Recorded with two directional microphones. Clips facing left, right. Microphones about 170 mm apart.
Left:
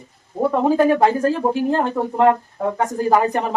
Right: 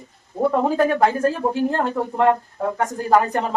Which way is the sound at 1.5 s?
15° left (ahead or behind).